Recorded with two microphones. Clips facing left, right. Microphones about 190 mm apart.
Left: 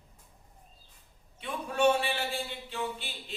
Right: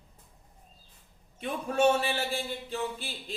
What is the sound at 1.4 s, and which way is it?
Speech, 40° right (ahead or behind).